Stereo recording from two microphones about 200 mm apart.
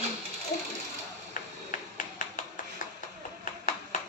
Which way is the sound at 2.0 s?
40° left (ahead or behind).